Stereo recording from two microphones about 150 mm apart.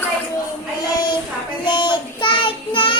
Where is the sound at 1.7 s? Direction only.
30° left (ahead or behind).